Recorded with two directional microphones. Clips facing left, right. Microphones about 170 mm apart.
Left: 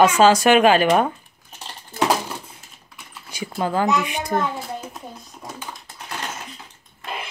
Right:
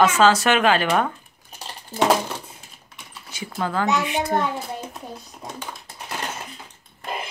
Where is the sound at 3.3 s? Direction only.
15° left (ahead or behind).